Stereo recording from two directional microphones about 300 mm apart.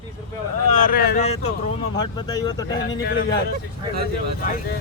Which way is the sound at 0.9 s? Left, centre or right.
Left.